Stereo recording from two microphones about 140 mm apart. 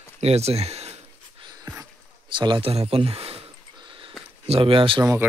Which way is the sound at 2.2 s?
35° right (ahead or behind).